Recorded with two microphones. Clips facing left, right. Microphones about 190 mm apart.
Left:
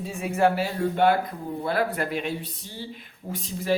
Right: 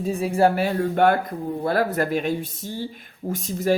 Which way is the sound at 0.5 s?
55° right (ahead or behind).